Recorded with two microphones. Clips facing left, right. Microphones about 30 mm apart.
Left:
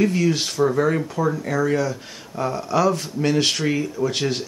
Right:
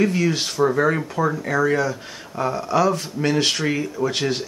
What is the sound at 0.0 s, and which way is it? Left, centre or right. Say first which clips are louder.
Speech: even; centre.